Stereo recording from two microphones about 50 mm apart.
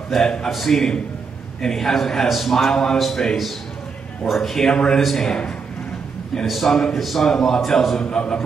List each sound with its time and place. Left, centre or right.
0.1 s a man's voice: centre
8.0 s a man's voice: centre